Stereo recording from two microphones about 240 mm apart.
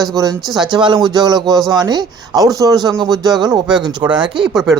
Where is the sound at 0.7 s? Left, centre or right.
Centre.